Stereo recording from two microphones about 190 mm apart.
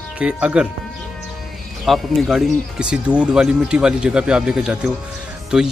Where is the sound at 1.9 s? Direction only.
Centre (ahead or behind).